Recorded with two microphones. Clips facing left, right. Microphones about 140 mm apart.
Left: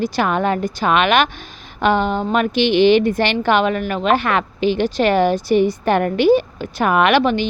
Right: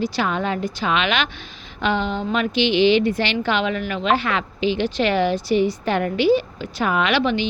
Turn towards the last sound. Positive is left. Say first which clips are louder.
# left 5 dB
turn(degrees=50)  # may be behind; listen again after turning